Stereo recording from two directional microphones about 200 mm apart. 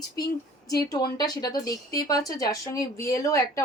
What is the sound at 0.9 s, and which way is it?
A woman's voice, 20° left (ahead or behind).